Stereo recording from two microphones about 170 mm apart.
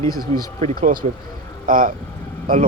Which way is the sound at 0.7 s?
55° right (ahead or behind).